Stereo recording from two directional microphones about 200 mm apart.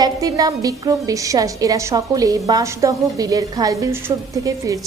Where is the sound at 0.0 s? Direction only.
15° right (ahead or behind).